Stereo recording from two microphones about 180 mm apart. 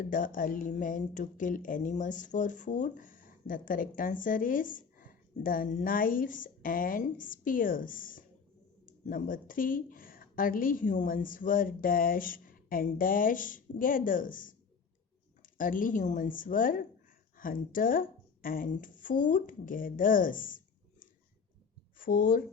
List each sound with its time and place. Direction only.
0.0 s speech: 50° left (ahead or behind)
21.9 s speech: 50° left (ahead or behind)